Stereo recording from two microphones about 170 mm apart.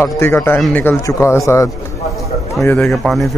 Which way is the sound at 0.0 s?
15° left (ahead or behind).